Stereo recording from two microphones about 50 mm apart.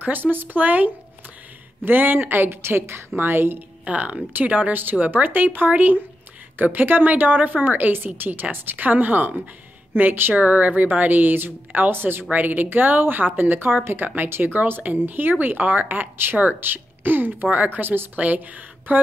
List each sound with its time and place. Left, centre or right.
0.0 s a woman's voice: right
3.8 s a woman's voice: right
12.3 s a woman's voice: right